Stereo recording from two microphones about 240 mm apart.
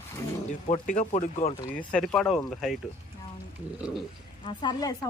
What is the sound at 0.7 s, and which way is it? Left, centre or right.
Speech, left.